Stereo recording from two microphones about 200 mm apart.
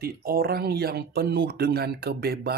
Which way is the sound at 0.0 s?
50° right (ahead or behind).